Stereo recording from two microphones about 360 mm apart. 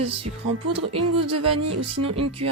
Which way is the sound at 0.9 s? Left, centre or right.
Centre.